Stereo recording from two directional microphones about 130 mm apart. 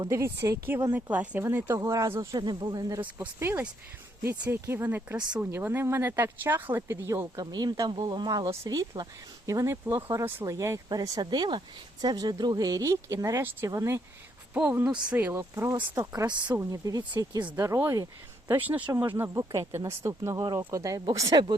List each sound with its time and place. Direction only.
0.0 s speech: 20° right (ahead or behind)
2.4 s speech: 35° right (ahead or behind)
3.2 s speech: 15° right (ahead or behind)
18.5 s speech: 15° right (ahead or behind)
20.4 s speech: 35° right (ahead or behind)